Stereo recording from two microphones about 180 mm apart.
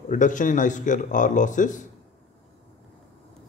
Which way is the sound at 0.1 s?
45° left (ahead or behind).